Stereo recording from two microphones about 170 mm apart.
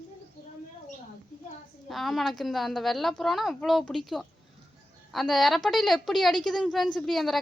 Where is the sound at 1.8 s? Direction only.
Centre (ahead or behind).